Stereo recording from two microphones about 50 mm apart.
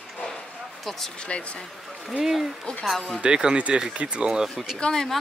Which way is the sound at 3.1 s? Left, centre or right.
Centre.